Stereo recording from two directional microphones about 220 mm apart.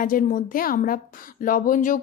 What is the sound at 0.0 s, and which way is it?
Speech, 40° left (ahead or behind).